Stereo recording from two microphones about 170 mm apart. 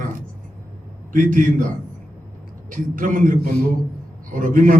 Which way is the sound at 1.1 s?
50° right (ahead or behind).